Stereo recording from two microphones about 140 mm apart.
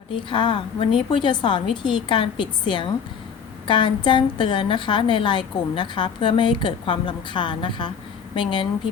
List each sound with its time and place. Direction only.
0.1 s a woman's voice: 35° left (ahead or behind)